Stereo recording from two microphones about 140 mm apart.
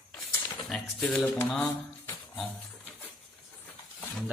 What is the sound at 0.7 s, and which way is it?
Speech, centre (ahead or behind).